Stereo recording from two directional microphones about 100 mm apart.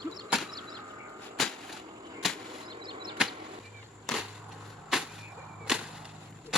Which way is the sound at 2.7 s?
50° right (ahead or behind).